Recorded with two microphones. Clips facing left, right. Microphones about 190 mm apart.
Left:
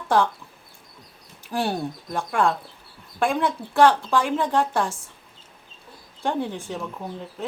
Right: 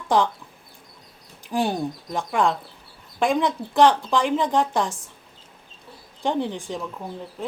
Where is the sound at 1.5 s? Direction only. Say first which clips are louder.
Right 2 dB; 15° right (ahead or behind).